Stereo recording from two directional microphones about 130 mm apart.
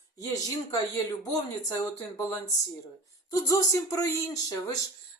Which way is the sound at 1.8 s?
25° left (ahead or behind).